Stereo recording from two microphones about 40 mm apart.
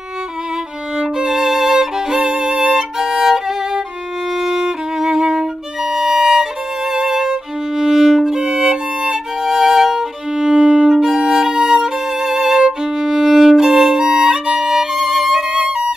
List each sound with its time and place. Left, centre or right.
0.9 s violin: centre
2.2 s music: centre
4.4 s violin: centre
10.3 s music: centre
15.5 s music: right